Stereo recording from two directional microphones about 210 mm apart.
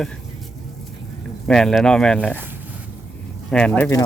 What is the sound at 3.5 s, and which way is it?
Speech, 5° left (ahead or behind).